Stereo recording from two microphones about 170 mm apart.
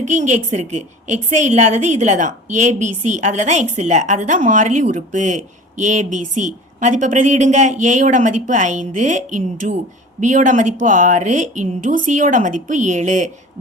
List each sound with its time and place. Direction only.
0.0 s a woman's voice: 45° right (ahead or behind)